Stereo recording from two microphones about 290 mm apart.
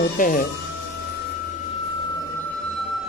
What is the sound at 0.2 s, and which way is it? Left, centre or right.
Speech, left.